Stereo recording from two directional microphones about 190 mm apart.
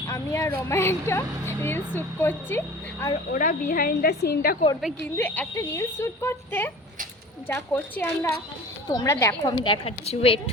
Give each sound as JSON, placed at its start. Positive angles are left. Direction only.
{"t": 0.1, "sound": "a woman's voice", "side_deg": 15}
{"t": 3.3, "sound": "a woman's voice", "side_deg": 45}
{"t": 5.1, "sound": "a woman's voice", "side_deg": 10}